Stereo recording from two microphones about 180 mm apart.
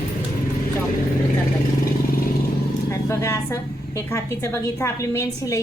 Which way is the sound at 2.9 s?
15° left (ahead or behind).